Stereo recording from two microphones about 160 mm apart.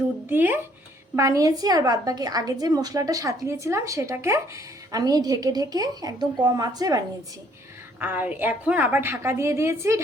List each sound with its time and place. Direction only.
0.3 s a woman's voice: 10° right (ahead or behind)
7.9 s a woman's voice: 10° right (ahead or behind)